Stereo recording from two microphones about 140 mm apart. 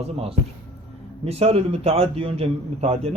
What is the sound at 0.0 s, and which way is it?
A man's voice, 45° right (ahead or behind).